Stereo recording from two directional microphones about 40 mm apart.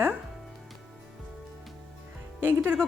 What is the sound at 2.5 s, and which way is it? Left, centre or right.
Speech, right.